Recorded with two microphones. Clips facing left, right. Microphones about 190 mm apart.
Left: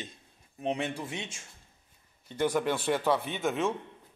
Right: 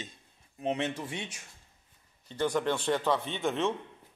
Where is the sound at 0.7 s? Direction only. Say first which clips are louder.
Right 1 dB; 10° left (ahead or behind).